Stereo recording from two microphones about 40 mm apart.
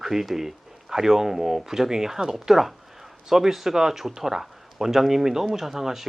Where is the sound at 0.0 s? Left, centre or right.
Centre.